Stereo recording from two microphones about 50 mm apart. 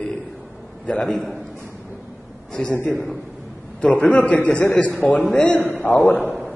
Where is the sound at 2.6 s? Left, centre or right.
Centre.